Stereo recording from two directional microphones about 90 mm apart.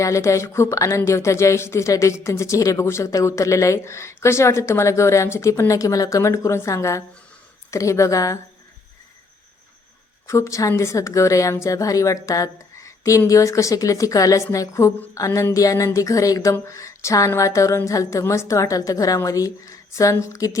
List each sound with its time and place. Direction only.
0.0 s speech: 35° left (ahead or behind)
10.2 s speech: 35° left (ahead or behind)